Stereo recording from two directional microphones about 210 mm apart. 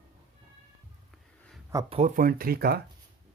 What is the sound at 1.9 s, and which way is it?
Speech, 35° right (ahead or behind).